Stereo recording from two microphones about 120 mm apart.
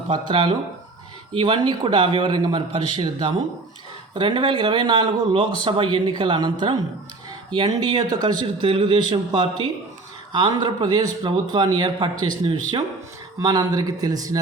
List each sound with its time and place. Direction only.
0.1 s a man's voice: 45° right (ahead or behind)
13.4 s a man's voice: 30° right (ahead or behind)